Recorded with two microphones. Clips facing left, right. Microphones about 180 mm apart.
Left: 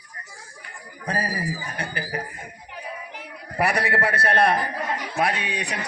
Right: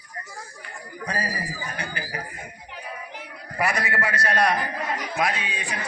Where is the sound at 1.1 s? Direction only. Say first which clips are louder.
Left 4 dB; 55° left (ahead or behind).